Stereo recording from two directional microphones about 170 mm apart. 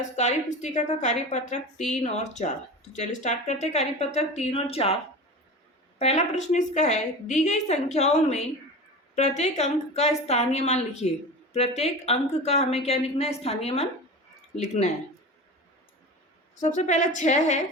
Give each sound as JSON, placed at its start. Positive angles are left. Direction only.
{"t": 0.2, "sound": "a woman's voice", "side_deg": 40}
{"t": 6.0, "sound": "a woman's voice", "side_deg": 40}
{"t": 16.6, "sound": "a woman's voice", "side_deg": 45}